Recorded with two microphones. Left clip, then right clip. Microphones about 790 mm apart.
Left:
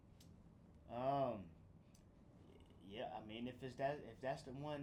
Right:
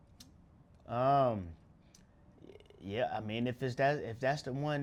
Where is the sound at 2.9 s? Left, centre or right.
Right.